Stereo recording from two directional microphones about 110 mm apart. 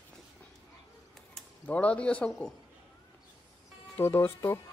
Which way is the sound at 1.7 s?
10° left (ahead or behind).